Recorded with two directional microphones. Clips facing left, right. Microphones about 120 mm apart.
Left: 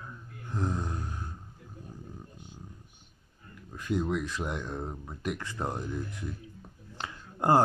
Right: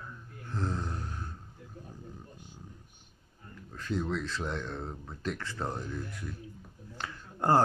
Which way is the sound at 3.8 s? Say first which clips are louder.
Left 3 dB; 15° left (ahead or behind).